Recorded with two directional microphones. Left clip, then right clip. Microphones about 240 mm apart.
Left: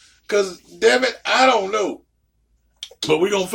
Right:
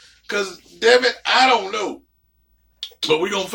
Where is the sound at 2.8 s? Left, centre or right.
Left.